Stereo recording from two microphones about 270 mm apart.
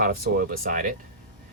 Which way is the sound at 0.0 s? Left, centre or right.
Right.